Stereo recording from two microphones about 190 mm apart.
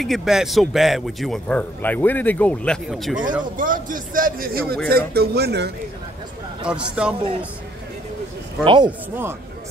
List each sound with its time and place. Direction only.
0.0 s a man's voice: centre (ahead or behind)
3.5 s a man's voice: 45° right (ahead or behind)
6.6 s a man's voice: 5° right (ahead or behind)
8.6 s speech: 25° right (ahead or behind)